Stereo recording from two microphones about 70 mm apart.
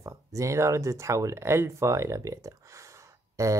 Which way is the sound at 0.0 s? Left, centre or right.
Right.